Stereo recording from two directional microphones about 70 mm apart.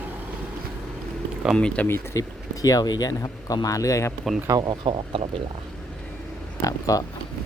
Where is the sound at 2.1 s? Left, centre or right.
Left.